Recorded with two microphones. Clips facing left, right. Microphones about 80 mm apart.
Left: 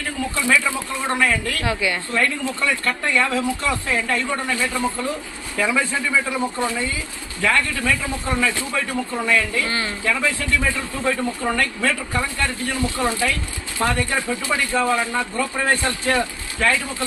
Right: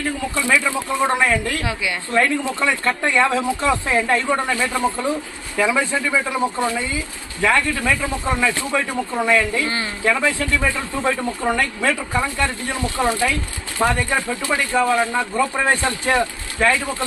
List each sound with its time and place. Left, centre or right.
0.4 s speech: centre
5.5 s speech: centre